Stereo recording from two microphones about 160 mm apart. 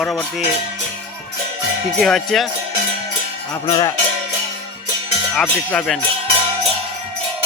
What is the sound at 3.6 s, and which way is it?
Cowbell, 30° left (ahead or behind).